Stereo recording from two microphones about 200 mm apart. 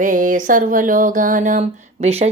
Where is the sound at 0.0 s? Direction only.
40° right (ahead or behind).